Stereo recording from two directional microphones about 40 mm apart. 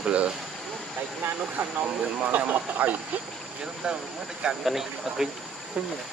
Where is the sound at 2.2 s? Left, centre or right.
Right.